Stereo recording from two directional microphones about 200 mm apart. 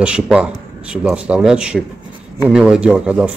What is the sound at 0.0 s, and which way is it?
Speech, 5° right (ahead or behind).